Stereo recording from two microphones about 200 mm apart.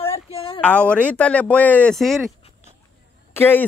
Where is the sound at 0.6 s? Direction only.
5° left (ahead or behind).